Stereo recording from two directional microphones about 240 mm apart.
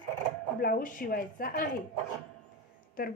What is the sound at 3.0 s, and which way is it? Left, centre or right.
Speech, left.